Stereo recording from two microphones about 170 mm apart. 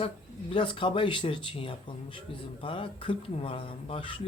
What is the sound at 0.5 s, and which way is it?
Speech, 30° left (ahead or behind).